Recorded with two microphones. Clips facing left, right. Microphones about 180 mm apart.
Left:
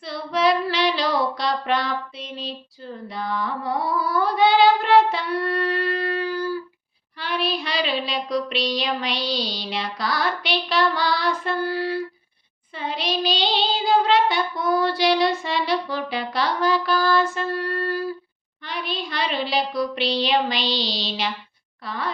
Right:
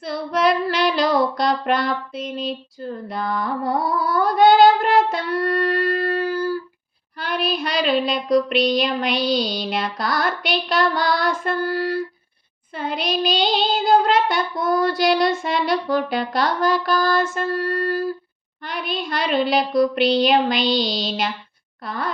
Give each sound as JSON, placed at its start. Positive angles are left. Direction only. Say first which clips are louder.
{"t": 0.0, "sound": "female singing", "louder": "right 2 dB", "side_deg": -50}
{"t": 2.8, "sound": "carnatic music", "louder": "right 4 dB", "side_deg": -50}
{"t": 7.2, "sound": "child singing", "louder": "right 2 dB", "side_deg": -45}